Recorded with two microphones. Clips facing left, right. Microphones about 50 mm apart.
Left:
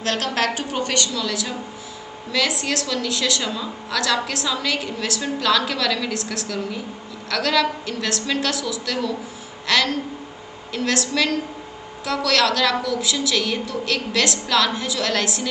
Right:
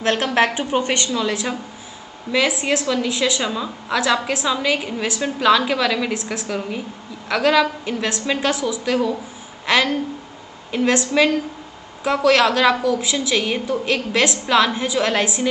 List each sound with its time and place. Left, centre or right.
0.0 s a woman's voice: right
2.6 s a woman's voice: right